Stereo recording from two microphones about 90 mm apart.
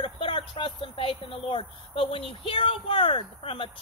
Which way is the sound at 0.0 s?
65° left (ahead or behind).